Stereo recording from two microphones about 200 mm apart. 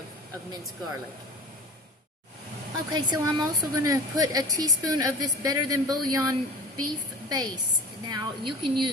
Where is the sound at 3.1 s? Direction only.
20° right (ahead or behind).